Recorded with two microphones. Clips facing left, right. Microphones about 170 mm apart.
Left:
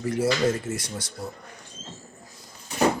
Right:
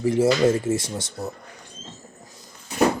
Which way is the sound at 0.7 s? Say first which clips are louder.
Right 7 dB; 25° right (ahead or behind).